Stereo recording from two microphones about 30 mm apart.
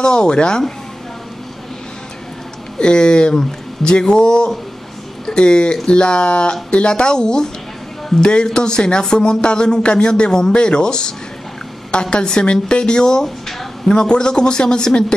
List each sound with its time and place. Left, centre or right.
0.0 s a man's voice: left
2.8 s a man's voice: left